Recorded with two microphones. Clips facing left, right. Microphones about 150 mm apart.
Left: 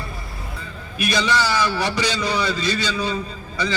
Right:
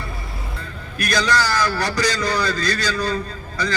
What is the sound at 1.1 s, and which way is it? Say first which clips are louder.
A man's voice: right 1 dB; 5° left (ahead or behind).